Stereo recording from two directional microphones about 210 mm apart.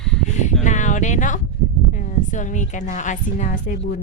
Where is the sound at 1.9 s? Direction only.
35° left (ahead or behind).